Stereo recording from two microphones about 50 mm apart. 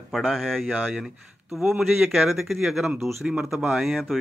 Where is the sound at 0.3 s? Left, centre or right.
Centre.